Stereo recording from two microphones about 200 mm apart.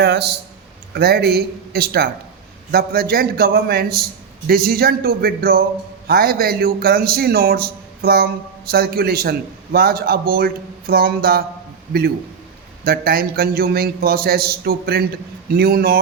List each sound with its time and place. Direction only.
0.0 s a man's voice: 55° right (ahead or behind)
12.8 s a man's voice: 50° right (ahead or behind)